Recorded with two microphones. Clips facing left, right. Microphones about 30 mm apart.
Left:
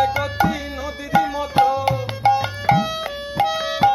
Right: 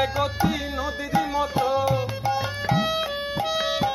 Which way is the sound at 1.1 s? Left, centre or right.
Left.